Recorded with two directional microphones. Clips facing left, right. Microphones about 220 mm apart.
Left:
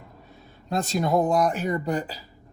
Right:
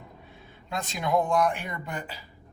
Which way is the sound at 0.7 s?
40° left (ahead or behind).